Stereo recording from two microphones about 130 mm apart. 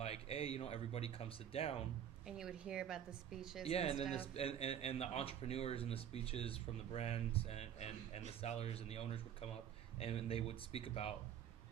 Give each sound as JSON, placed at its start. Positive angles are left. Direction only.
{"t": 0.0, "sound": "speech", "side_deg": 50}
{"t": 2.2, "sound": "a woman's voice", "side_deg": -5}
{"t": 3.7, "sound": "speech", "side_deg": 50}